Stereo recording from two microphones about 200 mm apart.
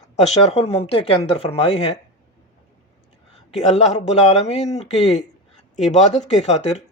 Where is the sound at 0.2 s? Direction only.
35° left (ahead or behind).